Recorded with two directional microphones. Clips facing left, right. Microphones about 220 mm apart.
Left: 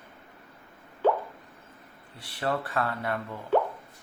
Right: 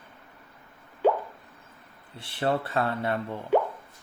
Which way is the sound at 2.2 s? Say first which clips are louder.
Right 3 dB; 25° right (ahead or behind).